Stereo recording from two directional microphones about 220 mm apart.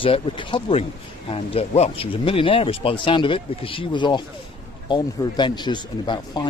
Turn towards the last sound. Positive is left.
turn(degrees=20)  # may be behind; listen again after turning